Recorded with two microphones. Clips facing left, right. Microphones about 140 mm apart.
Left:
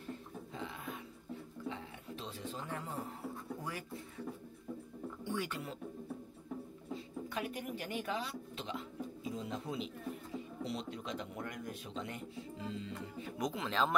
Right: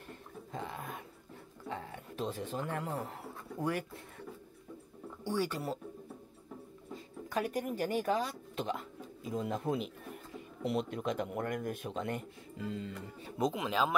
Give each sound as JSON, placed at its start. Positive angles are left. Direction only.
{"t": 0.0, "sound": "a sound", "side_deg": -50}
{"t": 1.7, "sound": "speech", "side_deg": -50}
{"t": 5.3, "sound": "speech", "side_deg": -35}
{"t": 7.2, "sound": "speech", "side_deg": -40}
{"t": 13.2, "sound": "speech", "side_deg": -25}
{"t": 13.6, "sound": "speech", "side_deg": -10}